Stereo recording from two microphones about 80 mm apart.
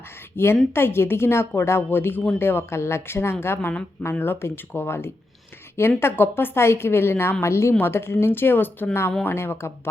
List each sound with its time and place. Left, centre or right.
0.3 s speech: left